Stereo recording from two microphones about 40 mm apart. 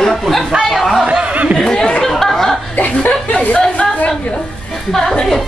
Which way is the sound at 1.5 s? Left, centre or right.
Centre.